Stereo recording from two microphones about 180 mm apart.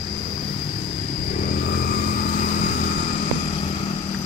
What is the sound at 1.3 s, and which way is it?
Vehicle, 55° left (ahead or behind).